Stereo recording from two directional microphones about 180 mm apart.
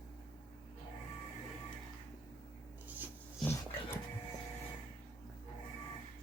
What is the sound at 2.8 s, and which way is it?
Rub, 10° right (ahead or behind).